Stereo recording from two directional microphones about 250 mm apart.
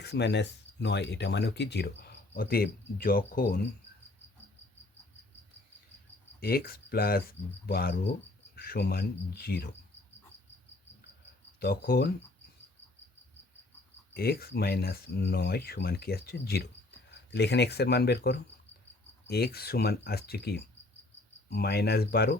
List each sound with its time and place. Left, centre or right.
0.0 s speech: left
6.4 s speech: left
11.6 s speech: left
14.1 s speech: left